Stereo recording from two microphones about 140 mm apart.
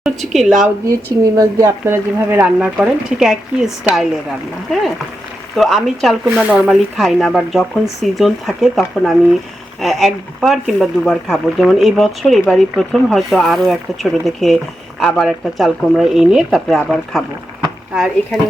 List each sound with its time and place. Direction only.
0.0 s a woman's voice: centre (ahead or behind)
1.2 s speech: 25° right (ahead or behind); by 4.0 s centre (ahead or behind)
5.5 s speech: centre (ahead or behind)